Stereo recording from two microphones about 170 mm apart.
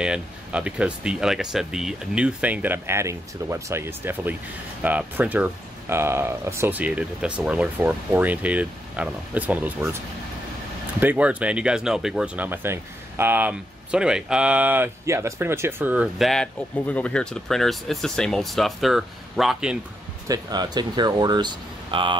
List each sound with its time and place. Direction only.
0.0 s speech: 5° right (ahead or behind)
11.0 s speech: 10° right (ahead or behind)
20.2 s speech: 25° right (ahead or behind)